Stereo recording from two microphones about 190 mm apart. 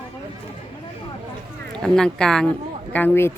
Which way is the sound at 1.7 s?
5° left (ahead or behind).